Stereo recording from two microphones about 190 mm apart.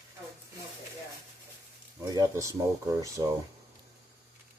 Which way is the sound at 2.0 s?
15° right (ahead or behind).